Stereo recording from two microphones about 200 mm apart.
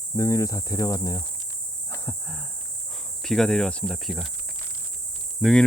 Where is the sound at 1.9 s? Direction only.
10° left (ahead or behind).